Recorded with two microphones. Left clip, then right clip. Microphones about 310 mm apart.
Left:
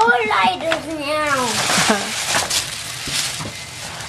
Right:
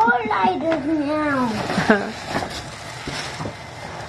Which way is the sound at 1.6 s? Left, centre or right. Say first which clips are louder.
Left 2 dB; centre.